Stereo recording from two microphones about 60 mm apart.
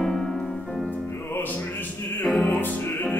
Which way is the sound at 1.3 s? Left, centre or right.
Left.